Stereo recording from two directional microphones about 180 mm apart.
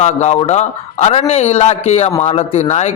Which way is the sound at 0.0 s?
40° left (ahead or behind).